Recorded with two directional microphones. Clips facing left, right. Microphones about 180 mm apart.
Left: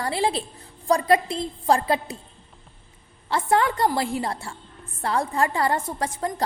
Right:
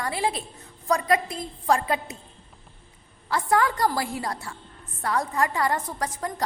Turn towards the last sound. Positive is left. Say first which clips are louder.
# left 3 dB
turn(degrees=30)  # may be behind; listen again after turning